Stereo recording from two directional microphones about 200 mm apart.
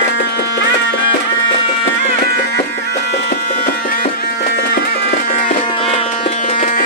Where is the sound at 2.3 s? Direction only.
55° left (ahead or behind).